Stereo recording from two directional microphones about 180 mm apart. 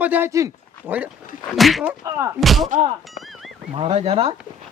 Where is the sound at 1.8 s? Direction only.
15° right (ahead or behind).